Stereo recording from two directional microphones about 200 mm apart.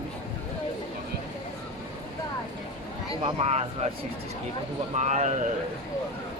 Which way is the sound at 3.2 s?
30° right (ahead or behind).